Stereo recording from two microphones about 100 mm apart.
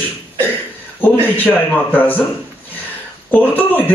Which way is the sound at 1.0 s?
15° left (ahead or behind).